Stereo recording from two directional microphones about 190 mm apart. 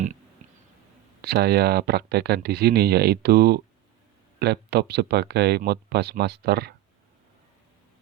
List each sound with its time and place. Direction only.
1.2 s speech: 55° right (ahead or behind)